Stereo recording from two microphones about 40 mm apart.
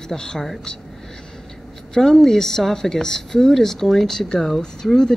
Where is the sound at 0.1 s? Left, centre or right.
Centre.